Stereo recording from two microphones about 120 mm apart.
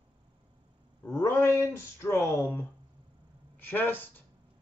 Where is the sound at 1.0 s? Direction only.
25° left (ahead or behind).